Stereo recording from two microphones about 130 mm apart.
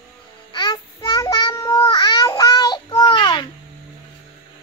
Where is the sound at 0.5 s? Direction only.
35° left (ahead or behind).